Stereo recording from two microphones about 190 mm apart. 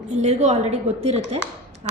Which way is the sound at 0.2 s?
35° right (ahead or behind).